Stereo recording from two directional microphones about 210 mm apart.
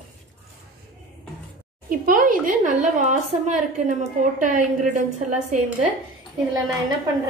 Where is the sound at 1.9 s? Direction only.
40° right (ahead or behind).